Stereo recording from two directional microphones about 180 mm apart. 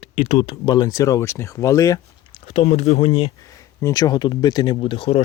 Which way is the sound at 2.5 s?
35° left (ahead or behind).